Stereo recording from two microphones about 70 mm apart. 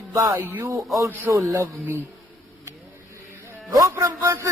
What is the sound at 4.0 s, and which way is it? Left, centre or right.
Speech, right.